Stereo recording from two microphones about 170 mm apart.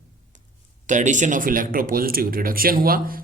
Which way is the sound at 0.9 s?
45° right (ahead or behind).